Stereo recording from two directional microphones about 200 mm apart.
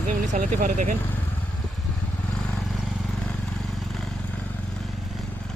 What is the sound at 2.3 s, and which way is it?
Vehicle, centre (ahead or behind).